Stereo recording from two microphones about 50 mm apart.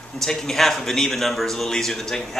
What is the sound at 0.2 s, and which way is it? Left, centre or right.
A man's voice, centre.